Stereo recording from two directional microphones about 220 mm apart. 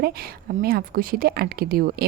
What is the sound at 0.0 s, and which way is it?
A woman's voice, 45° right (ahead or behind).